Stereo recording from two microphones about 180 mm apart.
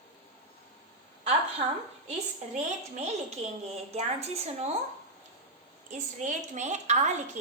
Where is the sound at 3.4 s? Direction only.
35° right (ahead or behind).